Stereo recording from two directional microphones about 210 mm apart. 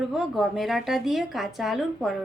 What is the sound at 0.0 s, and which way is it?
A woman's voice, centre (ahead or behind).